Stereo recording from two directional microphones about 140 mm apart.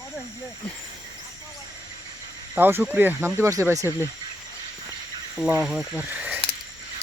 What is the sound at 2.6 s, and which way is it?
Speech, 15° right (ahead or behind).